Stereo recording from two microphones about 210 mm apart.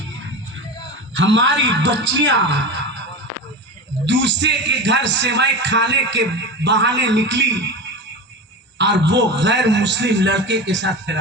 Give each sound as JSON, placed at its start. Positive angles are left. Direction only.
{"t": 1.1, "sound": "a man's voice", "side_deg": -60}
{"t": 4.0, "sound": "a man's voice", "side_deg": -60}
{"t": 8.8, "sound": "a man's voice", "side_deg": -55}